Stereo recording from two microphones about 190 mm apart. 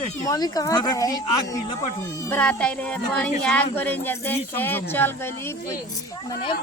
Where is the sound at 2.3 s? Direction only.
5° left (ahead or behind).